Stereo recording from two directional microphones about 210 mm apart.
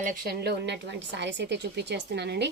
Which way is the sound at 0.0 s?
45° right (ahead or behind).